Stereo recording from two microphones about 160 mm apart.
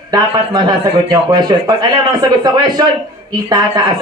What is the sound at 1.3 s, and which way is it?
Speech, 25° right (ahead or behind).